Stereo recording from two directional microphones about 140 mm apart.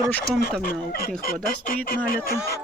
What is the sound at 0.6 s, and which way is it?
Speech, 90° left.